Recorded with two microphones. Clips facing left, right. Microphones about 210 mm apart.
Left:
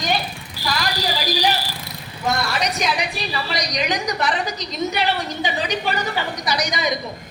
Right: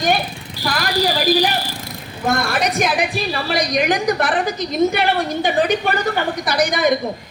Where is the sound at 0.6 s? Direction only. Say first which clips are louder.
Right 5 dB; 55° right (ahead or behind).